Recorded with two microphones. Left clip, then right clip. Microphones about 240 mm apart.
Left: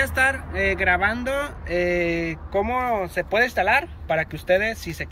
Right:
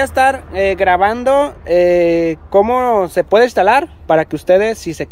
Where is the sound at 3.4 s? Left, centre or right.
Right.